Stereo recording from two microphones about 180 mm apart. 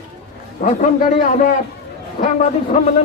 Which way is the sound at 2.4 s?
40° left (ahead or behind).